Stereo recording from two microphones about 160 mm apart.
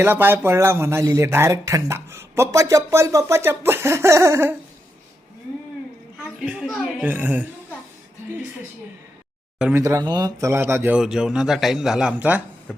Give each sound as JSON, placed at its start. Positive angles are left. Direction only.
{"t": 0.0, "sound": "speech", "side_deg": -10}
{"t": 6.4, "sound": "speech", "side_deg": -5}
{"t": 9.6, "sound": "speech", "side_deg": -5}
{"t": 9.8, "sound": "speech", "side_deg": -25}
{"t": 10.9, "sound": "a man's voice", "side_deg": -5}